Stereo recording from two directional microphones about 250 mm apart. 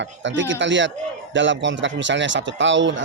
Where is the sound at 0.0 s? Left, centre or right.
Right.